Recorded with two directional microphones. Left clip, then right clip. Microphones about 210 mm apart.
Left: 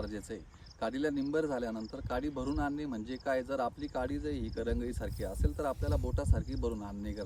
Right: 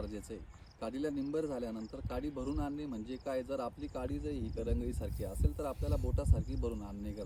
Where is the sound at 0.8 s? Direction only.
15° left (ahead or behind).